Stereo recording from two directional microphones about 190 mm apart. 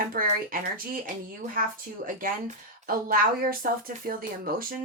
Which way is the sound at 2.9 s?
50° right (ahead or behind).